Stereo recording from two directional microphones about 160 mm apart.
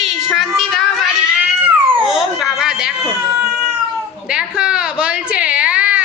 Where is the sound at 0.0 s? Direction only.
Centre (ahead or behind).